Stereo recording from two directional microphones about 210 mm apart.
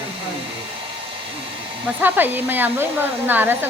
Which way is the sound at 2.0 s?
10° right (ahead or behind).